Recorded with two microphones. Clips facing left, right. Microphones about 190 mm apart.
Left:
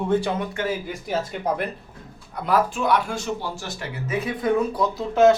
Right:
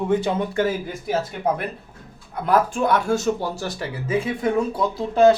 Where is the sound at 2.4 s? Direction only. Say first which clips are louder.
Right 2 dB; 50° right (ahead or behind).